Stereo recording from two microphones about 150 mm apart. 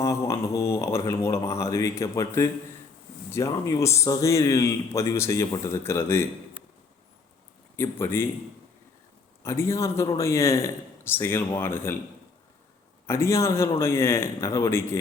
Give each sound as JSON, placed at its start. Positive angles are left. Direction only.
{"t": 0.0, "sound": "a man's voice", "side_deg": 20}
{"t": 7.8, "sound": "a man's voice", "side_deg": 15}
{"t": 9.4, "sound": "a man's voice", "side_deg": 20}
{"t": 13.1, "sound": "a man's voice", "side_deg": 15}